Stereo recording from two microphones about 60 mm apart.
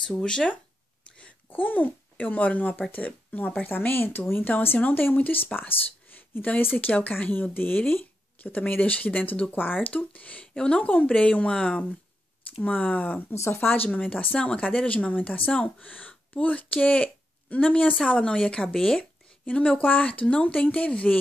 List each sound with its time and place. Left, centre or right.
0.2 s speech: centre
1.5 s speech: left
3.6 s speech: left
13.3 s speech: left
13.8 s speech: left; by 18.9 s centre
19.4 s speech: centre